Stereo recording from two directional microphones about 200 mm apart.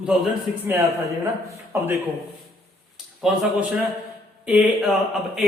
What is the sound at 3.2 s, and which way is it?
A man's voice, centre (ahead or behind).